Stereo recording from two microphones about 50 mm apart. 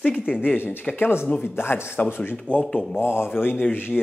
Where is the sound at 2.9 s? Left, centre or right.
Left.